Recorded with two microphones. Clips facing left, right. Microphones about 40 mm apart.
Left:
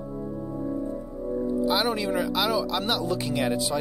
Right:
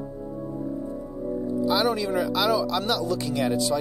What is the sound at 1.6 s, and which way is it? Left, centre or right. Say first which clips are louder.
Speech: right 4 dB; centre.